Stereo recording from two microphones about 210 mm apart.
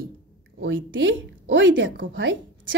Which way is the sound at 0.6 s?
65° right (ahead or behind).